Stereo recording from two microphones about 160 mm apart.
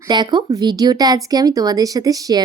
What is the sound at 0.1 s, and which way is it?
A woman's voice, 25° right (ahead or behind).